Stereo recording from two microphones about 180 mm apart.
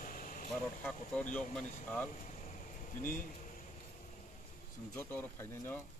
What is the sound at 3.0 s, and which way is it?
Speech, 50° left (ahead or behind).